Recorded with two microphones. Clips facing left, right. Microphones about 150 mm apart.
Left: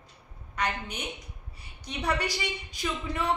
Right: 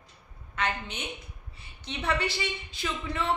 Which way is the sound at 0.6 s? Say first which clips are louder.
Even; 15° left (ahead or behind).